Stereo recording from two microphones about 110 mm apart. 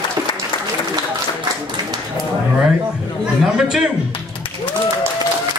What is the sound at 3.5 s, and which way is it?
Speech, 5° right (ahead or behind).